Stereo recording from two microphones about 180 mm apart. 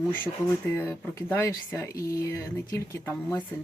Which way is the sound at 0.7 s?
10° left (ahead or behind).